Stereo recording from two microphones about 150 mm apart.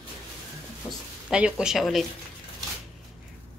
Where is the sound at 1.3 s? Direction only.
5° right (ahead or behind).